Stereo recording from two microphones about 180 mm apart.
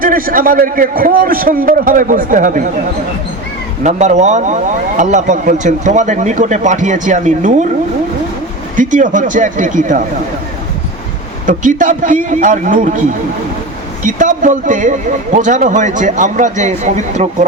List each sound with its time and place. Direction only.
0.0 s speech: 50° right (ahead or behind)
3.8 s speech: 40° right (ahead or behind)
8.7 s speech: 45° right (ahead or behind)
11.4 s speech: 45° right (ahead or behind)